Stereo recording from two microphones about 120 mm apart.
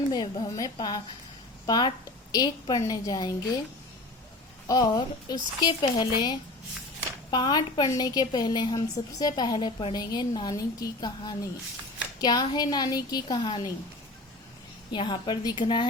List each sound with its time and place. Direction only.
0.1 s a woman's voice: 35° left (ahead or behind)
4.7 s a woman's voice: 35° left (ahead or behind)
14.9 s a woman's voice: 40° left (ahead or behind)